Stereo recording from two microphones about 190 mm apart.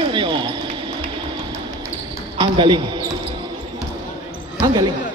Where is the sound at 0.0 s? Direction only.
25° right (ahead or behind).